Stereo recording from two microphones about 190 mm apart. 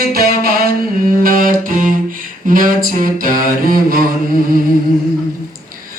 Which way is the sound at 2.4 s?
45° right (ahead or behind).